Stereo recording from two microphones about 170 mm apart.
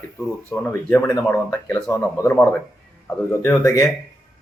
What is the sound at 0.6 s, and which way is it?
Speech, 10° left (ahead or behind).